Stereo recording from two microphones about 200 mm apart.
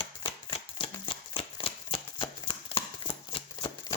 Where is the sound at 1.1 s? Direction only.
25° left (ahead or behind).